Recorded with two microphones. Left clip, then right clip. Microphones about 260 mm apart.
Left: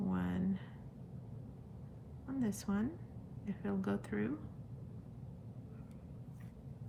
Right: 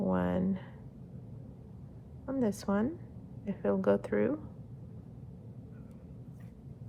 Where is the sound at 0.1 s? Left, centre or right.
Centre.